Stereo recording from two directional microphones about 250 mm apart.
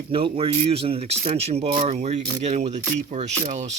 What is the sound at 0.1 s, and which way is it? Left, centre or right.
Speech, right.